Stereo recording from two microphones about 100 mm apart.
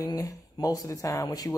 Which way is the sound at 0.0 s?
35° left (ahead or behind).